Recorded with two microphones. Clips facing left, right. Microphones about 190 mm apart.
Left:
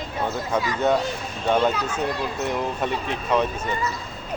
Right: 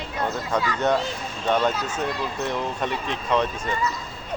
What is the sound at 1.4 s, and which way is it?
Speech, 10° left (ahead or behind).